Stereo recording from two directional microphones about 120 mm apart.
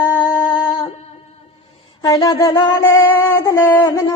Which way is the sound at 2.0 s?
35° left (ahead or behind).